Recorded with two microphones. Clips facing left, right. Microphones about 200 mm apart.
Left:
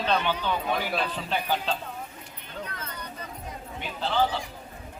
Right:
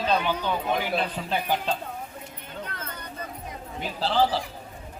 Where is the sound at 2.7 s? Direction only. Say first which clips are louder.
Right 1 dB; 50° right (ahead or behind).